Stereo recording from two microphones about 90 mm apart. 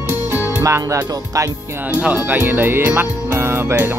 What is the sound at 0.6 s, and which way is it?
Speech, 35° right (ahead or behind).